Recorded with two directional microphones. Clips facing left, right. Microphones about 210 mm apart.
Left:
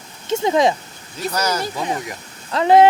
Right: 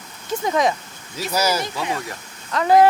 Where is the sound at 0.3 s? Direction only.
25° left (ahead or behind).